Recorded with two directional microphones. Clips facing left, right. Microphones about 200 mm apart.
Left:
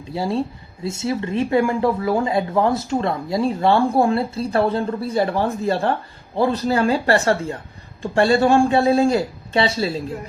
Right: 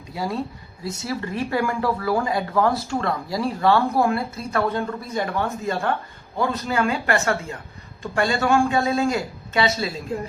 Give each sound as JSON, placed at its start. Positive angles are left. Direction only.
{"t": 0.1, "sound": "a man's voice", "side_deg": 30}